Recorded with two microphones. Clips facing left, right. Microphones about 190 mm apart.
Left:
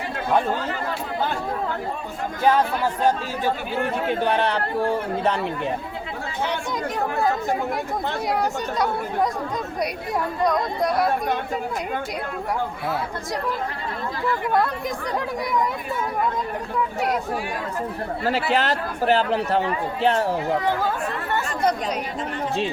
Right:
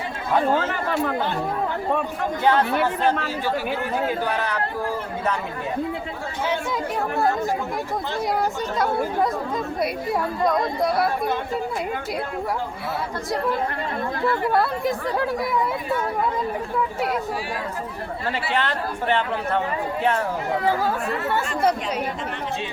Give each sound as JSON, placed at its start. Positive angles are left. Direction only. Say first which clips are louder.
{"t": 4.2, "sound": "a man's voice", "louder": "left 3 dB", "side_deg": 30}
{"t": 14.5, "sound": "speech", "louder": "right 1 dB", "side_deg": -5}
{"t": 18.3, "sound": "a man's voice", "louder": "left 3 dB", "side_deg": 40}